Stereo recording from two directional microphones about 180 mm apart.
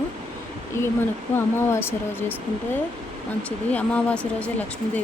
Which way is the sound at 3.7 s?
5° left (ahead or behind).